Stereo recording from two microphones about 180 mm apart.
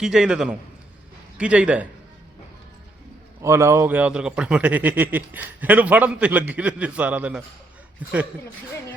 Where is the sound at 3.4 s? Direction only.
15° right (ahead or behind).